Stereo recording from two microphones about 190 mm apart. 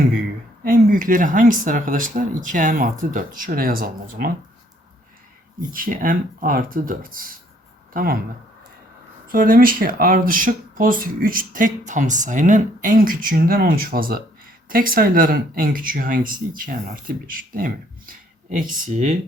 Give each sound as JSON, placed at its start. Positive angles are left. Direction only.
{"t": 0.6, "sound": "speech", "side_deg": -45}
{"t": 5.7, "sound": "speech", "side_deg": -50}
{"t": 9.2, "sound": "speech", "side_deg": -50}